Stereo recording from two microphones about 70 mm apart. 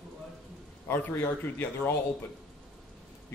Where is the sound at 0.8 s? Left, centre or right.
Left.